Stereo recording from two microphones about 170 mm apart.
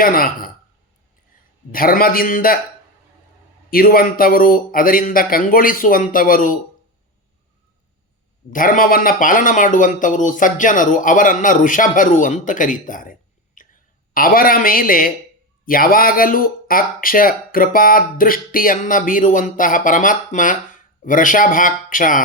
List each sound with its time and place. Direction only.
0.0 s speech: 60° left (ahead or behind)
1.7 s speech: 60° left (ahead or behind)
3.7 s speech: 60° left (ahead or behind)
8.4 s speech: 50° left (ahead or behind)
13.6 s whispering: 50° left (ahead or behind)
14.1 s speech: 55° left (ahead or behind)